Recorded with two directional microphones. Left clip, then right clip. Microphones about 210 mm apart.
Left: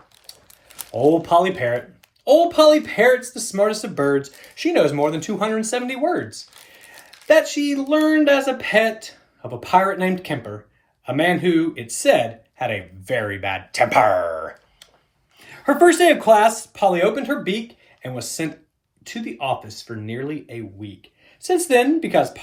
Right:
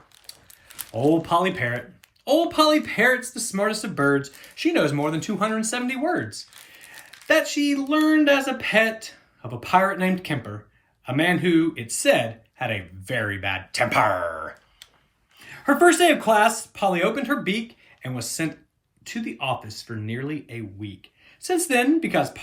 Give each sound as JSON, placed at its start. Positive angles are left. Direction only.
{"t": 0.7, "sound": "crumpling", "side_deg": 0}
{"t": 1.2, "sound": "speech", "side_deg": -15}